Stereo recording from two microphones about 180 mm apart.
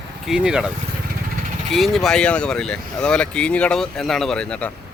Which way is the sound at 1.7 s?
Centre (ahead or behind).